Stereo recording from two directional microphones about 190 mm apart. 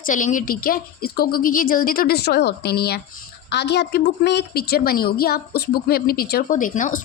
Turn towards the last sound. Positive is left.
turn(degrees=45)  # may be behind; listen again after turning